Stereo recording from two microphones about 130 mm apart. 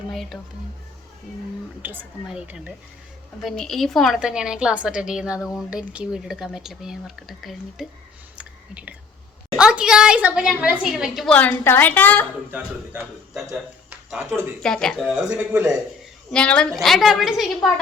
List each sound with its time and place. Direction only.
0.1 s speech: centre (ahead or behind)
1.8 s a woman's voice: 15° right (ahead or behind)
3.4 s speech: 5° left (ahead or behind)
8.4 s whispering: 10° right (ahead or behind)
9.6 s a woman's voice: 5° right (ahead or behind)
11.3 s a woman's voice: 15° left (ahead or behind)
12.5 s a woman's voice: 15° right (ahead or behind)
14.2 s a woman's voice: 15° right (ahead or behind)
14.6 s speech: 5° left (ahead or behind)
15.0 s a woman's voice: 10° right (ahead or behind)
16.3 s speech: 5° left (ahead or behind)